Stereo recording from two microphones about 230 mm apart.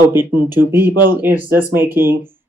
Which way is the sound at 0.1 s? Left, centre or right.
Centre.